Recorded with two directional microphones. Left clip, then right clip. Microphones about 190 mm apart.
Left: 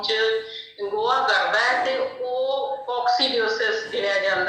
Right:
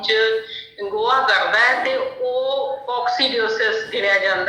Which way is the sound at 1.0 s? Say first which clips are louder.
Right 4 dB; 20° right (ahead or behind).